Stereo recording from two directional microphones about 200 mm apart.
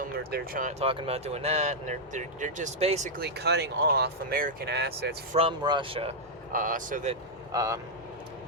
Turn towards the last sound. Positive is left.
turn(degrees=-15)  # may be behind; listen again after turning